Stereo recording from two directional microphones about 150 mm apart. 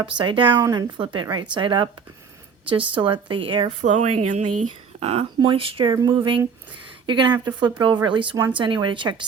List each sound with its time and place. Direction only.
0.0 s a woman's voice: 35° right (ahead or behind)
3.8 s a woman's voice: 55° right (ahead or behind); by 9.2 s 35° right (ahead or behind)